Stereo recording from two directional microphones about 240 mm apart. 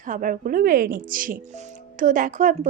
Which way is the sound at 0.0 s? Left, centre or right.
Right.